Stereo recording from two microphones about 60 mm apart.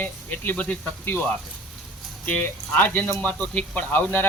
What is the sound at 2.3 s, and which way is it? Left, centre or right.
Speech, left.